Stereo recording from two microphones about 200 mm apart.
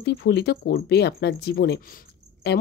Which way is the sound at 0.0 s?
55° left (ahead or behind).